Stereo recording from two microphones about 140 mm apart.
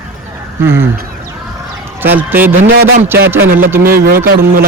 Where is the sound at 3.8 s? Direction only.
90° right.